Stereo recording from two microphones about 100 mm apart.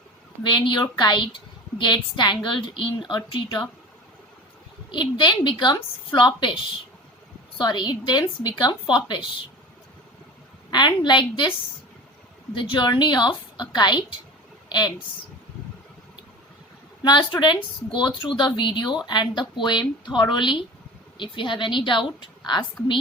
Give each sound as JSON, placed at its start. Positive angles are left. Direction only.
{"t": 0.4, "sound": "speech", "side_deg": 50}
{"t": 4.9, "sound": "speech", "side_deg": 50}
{"t": 7.6, "sound": "speech", "side_deg": 45}
{"t": 10.7, "sound": "speech", "side_deg": 45}
{"t": 12.7, "sound": "a woman's voice", "side_deg": 45}
{"t": 17.0, "sound": "speech", "side_deg": 50}